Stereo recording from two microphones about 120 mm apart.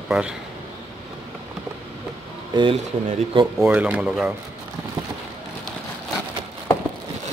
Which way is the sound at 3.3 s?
45° right (ahead or behind).